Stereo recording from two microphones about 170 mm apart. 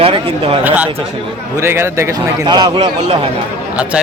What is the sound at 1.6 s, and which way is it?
A man's voice, 15° right (ahead or behind).